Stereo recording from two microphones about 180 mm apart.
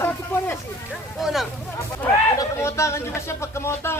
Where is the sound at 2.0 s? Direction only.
15° left (ahead or behind).